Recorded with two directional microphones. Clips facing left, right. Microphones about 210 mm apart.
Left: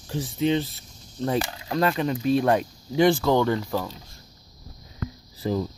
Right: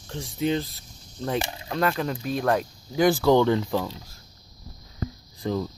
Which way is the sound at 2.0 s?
Centre (ahead or behind).